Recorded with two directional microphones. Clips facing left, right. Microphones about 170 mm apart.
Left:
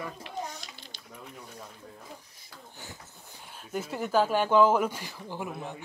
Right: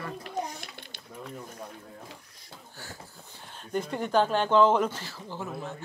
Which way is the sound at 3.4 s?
5° left (ahead or behind).